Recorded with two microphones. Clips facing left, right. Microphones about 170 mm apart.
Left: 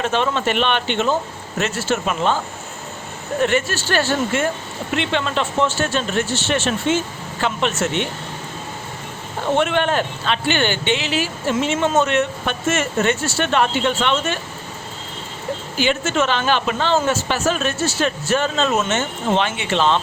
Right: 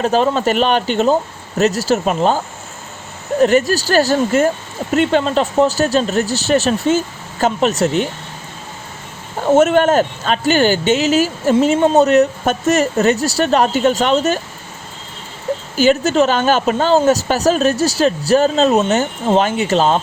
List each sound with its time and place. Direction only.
0.0 s speech: 40° right (ahead or behind)
3.4 s speech: 40° right (ahead or behind)
9.6 s speech: 40° right (ahead or behind)
15.8 s speech: 40° right (ahead or behind)